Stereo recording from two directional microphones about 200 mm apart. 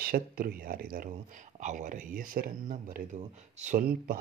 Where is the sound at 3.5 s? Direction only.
35° right (ahead or behind).